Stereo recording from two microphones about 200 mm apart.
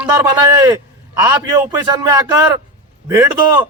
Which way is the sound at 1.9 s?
20° right (ahead or behind).